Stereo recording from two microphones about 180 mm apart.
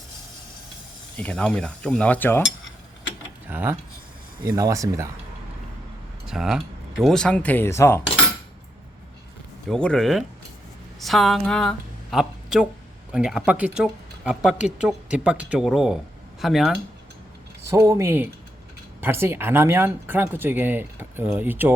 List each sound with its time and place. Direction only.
1.1 s speech: 5° left (ahead or behind)
3.5 s speech: 10° right (ahead or behind)
6.2 s speech: 5° right (ahead or behind); by 8.0 s 15° left (ahead or behind)
9.6 s a woman's voice: 5° left (ahead or behind)
17.6 s speech: 15° right (ahead or behind)